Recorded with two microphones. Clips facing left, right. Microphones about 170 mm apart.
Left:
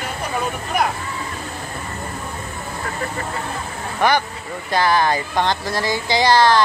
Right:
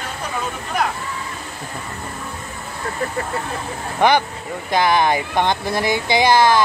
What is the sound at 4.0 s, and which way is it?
Speech, 15° right (ahead or behind).